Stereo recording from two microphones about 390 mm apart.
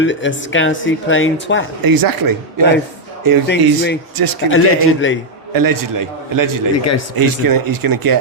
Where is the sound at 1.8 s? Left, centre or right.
Right.